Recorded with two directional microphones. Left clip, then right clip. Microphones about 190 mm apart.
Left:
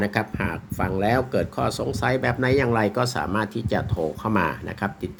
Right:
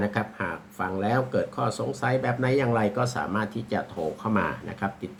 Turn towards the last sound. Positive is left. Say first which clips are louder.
# left 3 dB
turn(degrees=45)  # may be behind; listen again after turning